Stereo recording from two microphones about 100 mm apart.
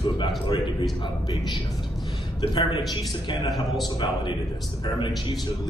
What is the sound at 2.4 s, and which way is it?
Speech, 60° left (ahead or behind).